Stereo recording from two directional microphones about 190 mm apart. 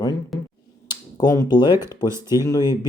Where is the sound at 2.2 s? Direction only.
20° left (ahead or behind).